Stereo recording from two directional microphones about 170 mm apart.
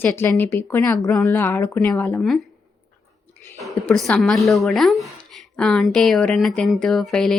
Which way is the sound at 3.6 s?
Centre (ahead or behind).